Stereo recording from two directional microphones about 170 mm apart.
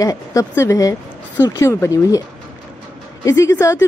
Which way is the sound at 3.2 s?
15° left (ahead or behind).